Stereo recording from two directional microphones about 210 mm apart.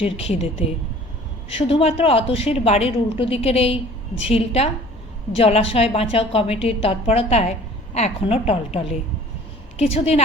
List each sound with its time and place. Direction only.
0.0 s a woman's voice: 30° left (ahead or behind)
1.5 s a woman's voice: 25° left (ahead or behind)